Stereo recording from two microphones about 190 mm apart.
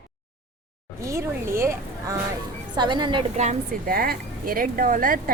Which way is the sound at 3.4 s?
45° right (ahead or behind).